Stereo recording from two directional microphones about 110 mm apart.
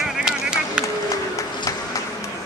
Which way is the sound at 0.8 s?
30° left (ahead or behind).